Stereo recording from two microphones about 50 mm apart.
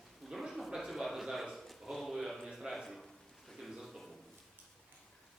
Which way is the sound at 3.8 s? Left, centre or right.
Centre.